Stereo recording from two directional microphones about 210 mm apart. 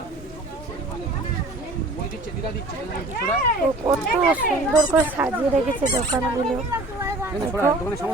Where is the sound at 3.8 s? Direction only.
20° right (ahead or behind).